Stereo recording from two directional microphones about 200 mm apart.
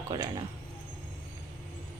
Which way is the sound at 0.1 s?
20° right (ahead or behind).